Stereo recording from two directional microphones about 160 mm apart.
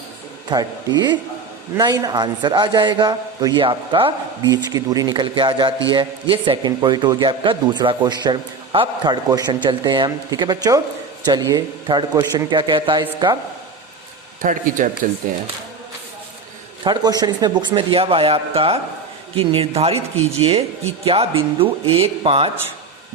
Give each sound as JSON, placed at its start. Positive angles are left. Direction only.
{"t": 0.5, "sound": "speech", "side_deg": -25}
{"t": 14.4, "sound": "speech", "side_deg": -55}
{"t": 16.8, "sound": "speech", "side_deg": -25}